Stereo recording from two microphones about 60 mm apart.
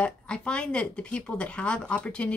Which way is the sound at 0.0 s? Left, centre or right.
Centre.